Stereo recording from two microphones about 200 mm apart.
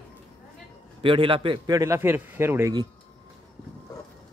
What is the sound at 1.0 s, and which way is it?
A man's voice, 25° right (ahead or behind).